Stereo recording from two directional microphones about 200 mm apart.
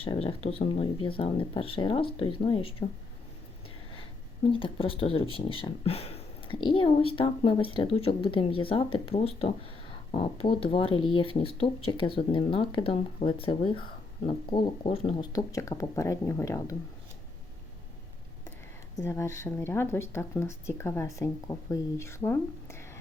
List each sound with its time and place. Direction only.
0.0 s speech: 30° left (ahead or behind)
4.4 s speech: 25° left (ahead or behind)
18.9 s speech: 15° left (ahead or behind)